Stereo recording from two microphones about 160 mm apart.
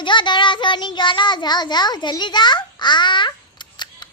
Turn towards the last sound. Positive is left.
turn(degrees=30)  # may be behind; listen again after turning